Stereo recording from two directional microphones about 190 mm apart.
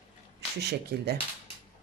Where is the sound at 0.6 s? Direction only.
60° right (ahead or behind).